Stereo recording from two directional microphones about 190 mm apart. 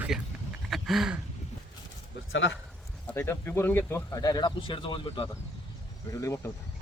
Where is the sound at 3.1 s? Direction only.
10° left (ahead or behind).